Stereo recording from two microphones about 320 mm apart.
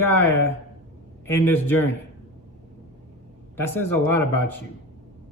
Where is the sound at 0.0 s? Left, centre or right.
Centre.